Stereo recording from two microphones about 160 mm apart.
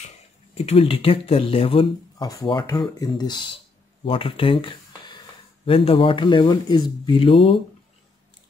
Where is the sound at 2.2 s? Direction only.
25° left (ahead or behind).